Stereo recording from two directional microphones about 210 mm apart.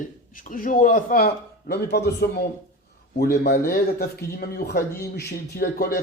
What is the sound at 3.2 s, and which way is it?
A man's voice, 50° left (ahead or behind).